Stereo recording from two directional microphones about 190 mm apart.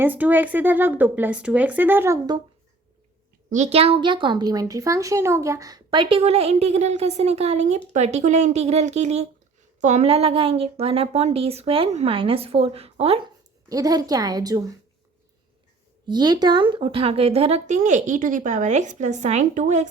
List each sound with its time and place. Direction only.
0.0 s speech: 10° right (ahead or behind)
3.5 s a woman's voice: 35° right (ahead or behind)
13.7 s a woman's voice: 20° right (ahead or behind)
16.0 s a woman's voice: 20° right (ahead or behind); by 19.9 s 40° right (ahead or behind)